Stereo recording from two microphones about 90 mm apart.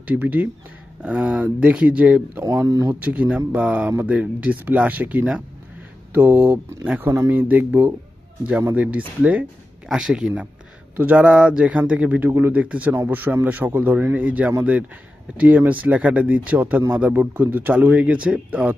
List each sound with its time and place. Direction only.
0.0 s speech: 15° right (ahead or behind)